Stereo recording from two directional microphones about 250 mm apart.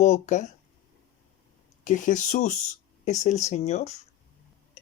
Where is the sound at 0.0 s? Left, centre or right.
Left.